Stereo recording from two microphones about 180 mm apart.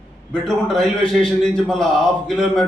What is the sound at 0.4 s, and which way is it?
A man's voice, centre (ahead or behind).